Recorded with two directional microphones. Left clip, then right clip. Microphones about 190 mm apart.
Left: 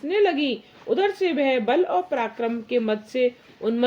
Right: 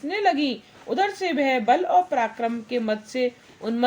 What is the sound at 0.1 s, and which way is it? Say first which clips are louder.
A woman's voice: left 1 dB; 30° left (ahead or behind).